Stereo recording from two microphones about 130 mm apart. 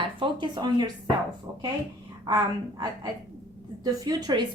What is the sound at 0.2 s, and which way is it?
Speech, 35° right (ahead or behind).